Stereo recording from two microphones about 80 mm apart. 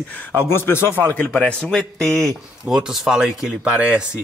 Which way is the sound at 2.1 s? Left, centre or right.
Right.